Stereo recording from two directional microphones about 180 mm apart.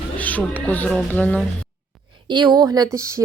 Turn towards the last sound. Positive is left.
turn(degrees=-20)  # may be behind; listen again after turning